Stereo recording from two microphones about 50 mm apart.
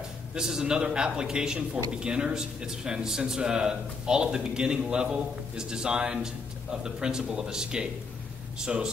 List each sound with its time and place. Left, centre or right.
0.3 s a man's voice: centre